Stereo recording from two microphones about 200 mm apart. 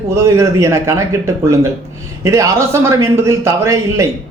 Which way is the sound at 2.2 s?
15° right (ahead or behind).